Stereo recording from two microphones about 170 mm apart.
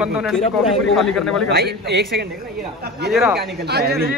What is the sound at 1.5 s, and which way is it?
Speech, 75° right (ahead or behind).